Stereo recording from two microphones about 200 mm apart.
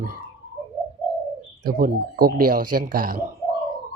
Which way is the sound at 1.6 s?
45° right (ahead or behind).